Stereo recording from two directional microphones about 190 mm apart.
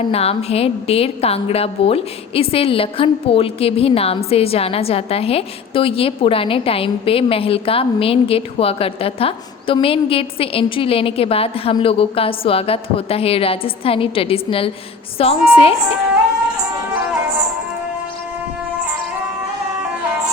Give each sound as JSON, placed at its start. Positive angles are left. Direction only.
{"t": 0.0, "sound": "a woman's voice", "side_deg": 30}